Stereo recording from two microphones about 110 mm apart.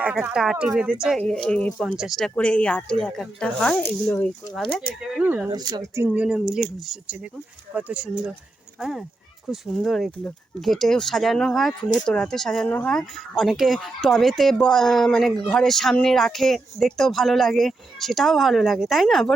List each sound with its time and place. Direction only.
0.0 s a woman's voice: 10° right (ahead or behind)
1.3 s speech: 5° left (ahead or behind)
4.9 s speech: 5° right (ahead or behind)
5.5 s speech: 35° right (ahead or behind)
6.1 s a woman's voice: 5° right (ahead or behind)